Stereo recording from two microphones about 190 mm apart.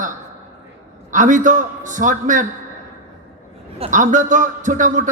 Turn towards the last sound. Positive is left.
turn(degrees=-40)  # may be behind; listen again after turning